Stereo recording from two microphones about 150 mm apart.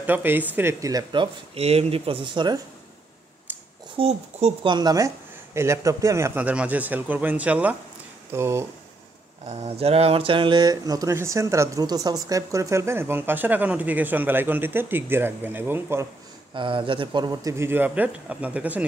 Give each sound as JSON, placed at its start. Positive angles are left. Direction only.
{"t": 0.0, "sound": "speech", "side_deg": -15}
{"t": 3.5, "sound": "a sound", "side_deg": -10}
{"t": 4.0, "sound": "speech", "side_deg": -45}
{"t": 4.6, "sound": "speech", "side_deg": -25}
{"t": 9.5, "sound": "speech", "side_deg": -45}
{"t": 16.5, "sound": "speech", "side_deg": -35}